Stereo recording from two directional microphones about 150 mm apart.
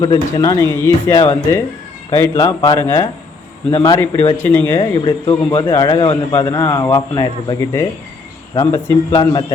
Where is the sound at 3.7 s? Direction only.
30° left (ahead or behind).